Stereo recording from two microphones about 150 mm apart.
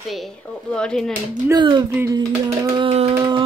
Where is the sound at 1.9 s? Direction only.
20° right (ahead or behind).